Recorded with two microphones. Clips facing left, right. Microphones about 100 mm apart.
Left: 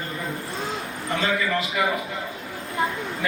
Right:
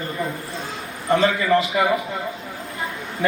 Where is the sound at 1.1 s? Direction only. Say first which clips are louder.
Right 7 dB; 30° right (ahead or behind).